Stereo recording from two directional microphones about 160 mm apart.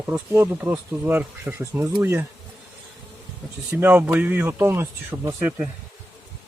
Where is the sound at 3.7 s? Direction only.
10° right (ahead or behind).